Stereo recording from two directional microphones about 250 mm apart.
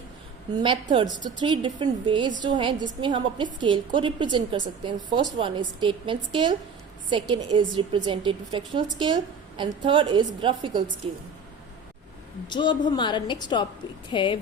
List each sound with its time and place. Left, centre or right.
0.6 s a woman's voice: centre
12.5 s a woman's voice: centre